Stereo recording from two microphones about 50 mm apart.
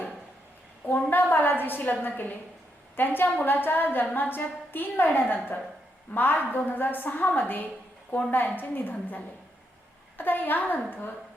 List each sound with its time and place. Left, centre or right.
1.1 s a woman's voice: left